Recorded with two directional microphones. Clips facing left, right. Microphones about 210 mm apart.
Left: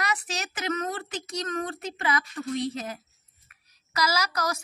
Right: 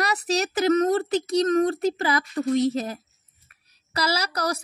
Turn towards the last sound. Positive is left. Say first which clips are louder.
# right 2 dB
turn(degrees=-35)  # may be behind; listen again after turning